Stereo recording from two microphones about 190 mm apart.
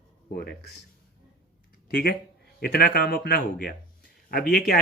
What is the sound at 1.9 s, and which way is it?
Speech, 50° left (ahead or behind).